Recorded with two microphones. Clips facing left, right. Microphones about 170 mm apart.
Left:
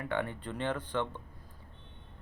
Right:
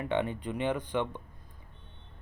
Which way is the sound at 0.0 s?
20° right (ahead or behind).